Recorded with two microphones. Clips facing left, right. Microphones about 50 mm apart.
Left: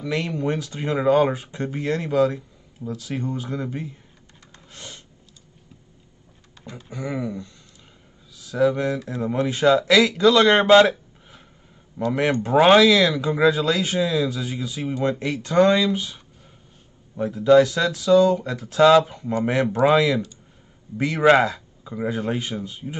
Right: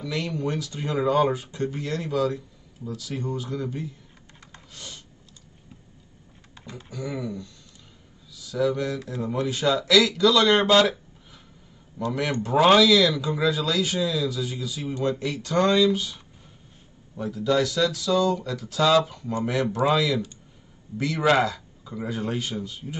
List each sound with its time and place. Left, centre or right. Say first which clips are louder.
0.0 s speech: left 3 dB; left
4.7 s a sound: left 2 dB; left
6.9 s speech: left 3 dB; left
17.2 s speech: left 8 dB; left
21.3 s speech: left 5 dB; left